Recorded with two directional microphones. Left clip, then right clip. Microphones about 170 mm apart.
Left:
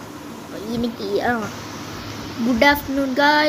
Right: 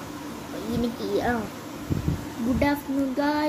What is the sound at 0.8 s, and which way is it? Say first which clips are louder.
Speech: left 5 dB; 10° left (ahead or behind).